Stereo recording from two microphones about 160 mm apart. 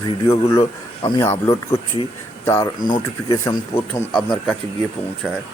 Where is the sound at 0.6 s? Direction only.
30° left (ahead or behind).